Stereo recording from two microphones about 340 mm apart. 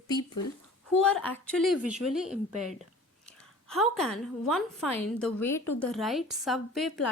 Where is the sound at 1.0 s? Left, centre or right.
Centre.